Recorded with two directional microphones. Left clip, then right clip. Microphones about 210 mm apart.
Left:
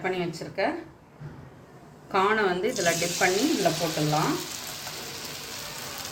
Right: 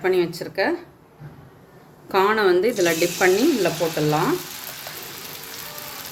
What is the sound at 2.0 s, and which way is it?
Speech, 40° right (ahead or behind).